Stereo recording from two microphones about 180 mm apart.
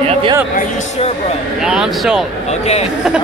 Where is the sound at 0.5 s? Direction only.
40° left (ahead or behind).